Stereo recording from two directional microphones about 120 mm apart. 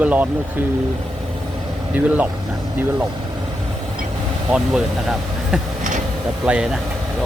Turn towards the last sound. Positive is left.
turn(degrees=-5)  # may be behind; listen again after turning